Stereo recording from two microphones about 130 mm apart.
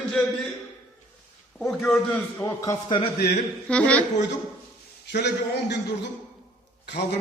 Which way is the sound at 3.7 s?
10° left (ahead or behind).